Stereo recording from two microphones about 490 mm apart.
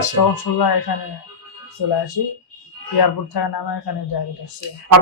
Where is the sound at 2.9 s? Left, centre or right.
Left.